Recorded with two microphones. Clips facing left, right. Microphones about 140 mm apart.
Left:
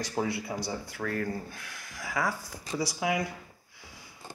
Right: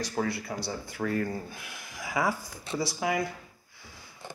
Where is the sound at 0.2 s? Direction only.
5° left (ahead or behind).